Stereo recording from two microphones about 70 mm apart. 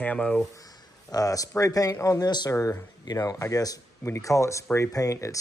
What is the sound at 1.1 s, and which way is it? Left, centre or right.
Speech, left.